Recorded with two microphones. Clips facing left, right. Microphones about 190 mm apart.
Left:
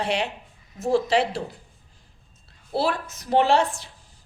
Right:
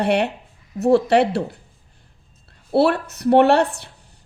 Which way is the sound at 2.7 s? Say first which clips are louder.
Right 8 dB; 65° right (ahead or behind).